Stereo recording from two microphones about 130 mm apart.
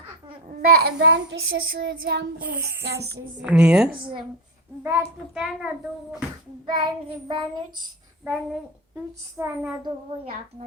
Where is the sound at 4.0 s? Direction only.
40° right (ahead or behind).